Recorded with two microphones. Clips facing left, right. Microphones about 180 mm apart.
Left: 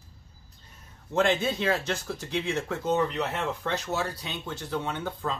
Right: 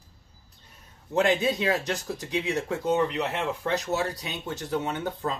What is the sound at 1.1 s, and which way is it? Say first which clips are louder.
Speech: right 2 dB; 15° right (ahead or behind).